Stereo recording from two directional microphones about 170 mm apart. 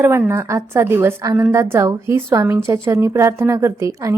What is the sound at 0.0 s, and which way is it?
A woman's voice, 15° right (ahead or behind).